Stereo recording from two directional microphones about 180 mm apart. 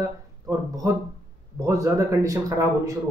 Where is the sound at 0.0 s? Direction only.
20° right (ahead or behind).